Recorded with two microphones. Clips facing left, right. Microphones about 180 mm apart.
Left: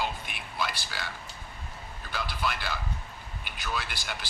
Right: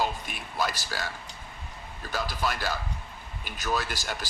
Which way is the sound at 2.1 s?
45° right (ahead or behind).